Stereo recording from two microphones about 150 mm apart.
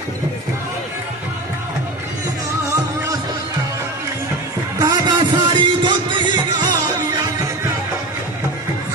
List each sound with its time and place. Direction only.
4.7 s music: 25° right (ahead or behind)